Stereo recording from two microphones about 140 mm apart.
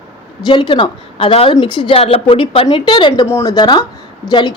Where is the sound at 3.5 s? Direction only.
30° left (ahead or behind).